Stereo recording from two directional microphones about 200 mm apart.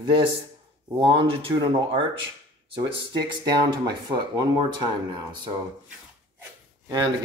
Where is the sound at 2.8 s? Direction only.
20° right (ahead or behind).